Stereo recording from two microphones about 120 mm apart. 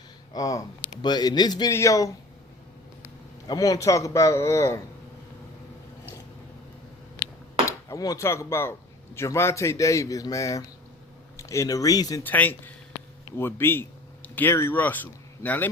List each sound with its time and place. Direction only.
0.3 s a man's voice: 30° left (ahead or behind)
3.4 s a man's voice: 35° left (ahead or behind)
7.6 s a man's voice: 25° left (ahead or behind)
12.2 s a man's voice: 15° left (ahead or behind)